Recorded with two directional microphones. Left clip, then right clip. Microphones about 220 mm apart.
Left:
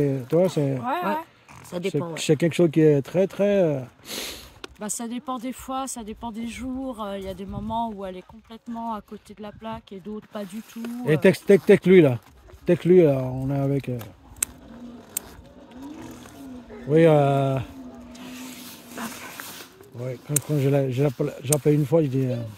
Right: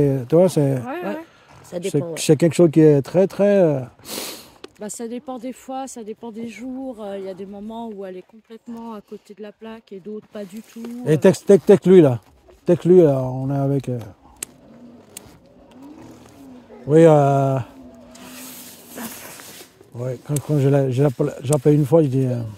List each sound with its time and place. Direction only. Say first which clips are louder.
0.0 s speech: right 6 dB; 35° right (ahead or behind)
1.7 s speech: right 2 dB; centre (ahead or behind)
2.1 s speech: right 6 dB; 35° right (ahead or behind)
4.6 s speech: right 1 dB; 25° left (ahead or behind)
11.1 s speech: right 4 dB; 25° right (ahead or behind)
16.9 s speech: right 5 dB; 30° right (ahead or behind)
18.1 s a sound: right 1 dB; 30° right (ahead or behind)
18.6 s a sound: left 1 dB; 20° right (ahead or behind)
20.1 s speech: right 4 dB; 35° right (ahead or behind)